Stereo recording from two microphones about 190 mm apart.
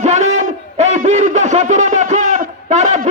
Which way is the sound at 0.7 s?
35° right (ahead or behind).